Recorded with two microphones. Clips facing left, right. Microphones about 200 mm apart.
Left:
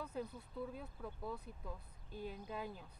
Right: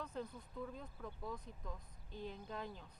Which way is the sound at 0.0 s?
10° left (ahead or behind).